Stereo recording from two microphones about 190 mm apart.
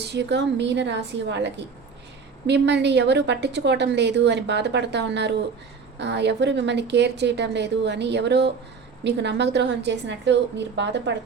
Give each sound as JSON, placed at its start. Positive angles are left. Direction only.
{"t": 0.0, "sound": "a woman's voice", "side_deg": -65}